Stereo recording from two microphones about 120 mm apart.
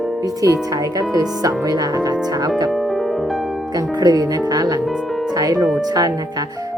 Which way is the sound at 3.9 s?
35° right (ahead or behind).